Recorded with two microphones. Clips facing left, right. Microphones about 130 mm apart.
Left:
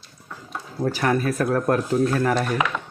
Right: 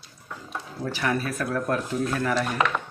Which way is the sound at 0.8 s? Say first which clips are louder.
Left 6 dB; 40° left (ahead or behind).